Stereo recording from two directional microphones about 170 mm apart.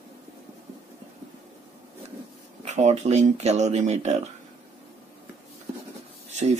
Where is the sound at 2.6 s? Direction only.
40° right (ahead or behind).